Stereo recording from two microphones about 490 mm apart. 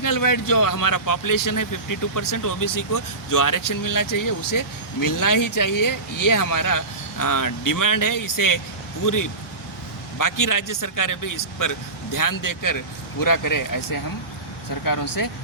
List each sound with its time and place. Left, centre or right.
0.0 s speech: left